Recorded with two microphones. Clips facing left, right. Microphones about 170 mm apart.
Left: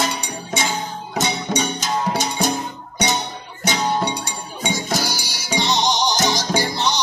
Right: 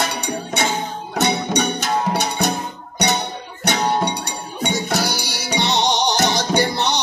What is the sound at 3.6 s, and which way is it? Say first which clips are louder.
Music: right 1 dB; 60° right (ahead or behind).